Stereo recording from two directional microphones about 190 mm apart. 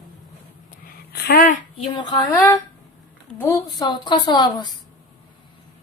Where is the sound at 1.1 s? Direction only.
55° left (ahead or behind).